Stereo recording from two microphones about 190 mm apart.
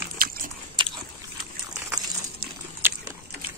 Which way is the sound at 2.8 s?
10° right (ahead or behind).